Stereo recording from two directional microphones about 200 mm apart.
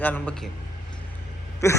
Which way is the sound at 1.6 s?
15° left (ahead or behind).